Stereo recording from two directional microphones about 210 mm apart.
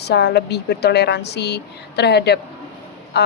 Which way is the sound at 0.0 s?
50° left (ahead or behind).